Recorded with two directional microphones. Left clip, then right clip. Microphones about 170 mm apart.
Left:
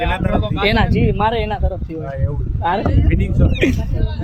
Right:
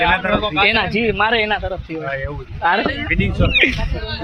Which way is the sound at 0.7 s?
30° left (ahead or behind).